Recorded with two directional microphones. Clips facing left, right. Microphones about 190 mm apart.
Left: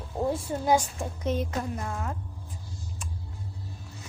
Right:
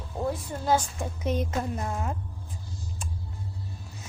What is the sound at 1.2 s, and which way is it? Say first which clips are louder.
Speech: right 1 dB; 20° right (ahead or behind).